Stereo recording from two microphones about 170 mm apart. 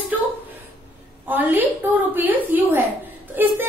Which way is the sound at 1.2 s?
10° right (ahead or behind).